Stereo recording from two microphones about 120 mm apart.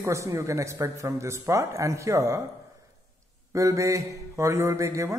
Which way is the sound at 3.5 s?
25° right (ahead or behind).